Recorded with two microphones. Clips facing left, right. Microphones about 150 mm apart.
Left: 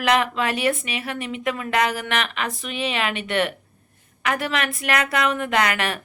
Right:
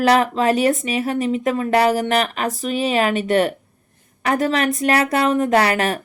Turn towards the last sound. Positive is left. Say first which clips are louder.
# right 5 dB
turn(degrees=-40)  # may be behind; listen again after turning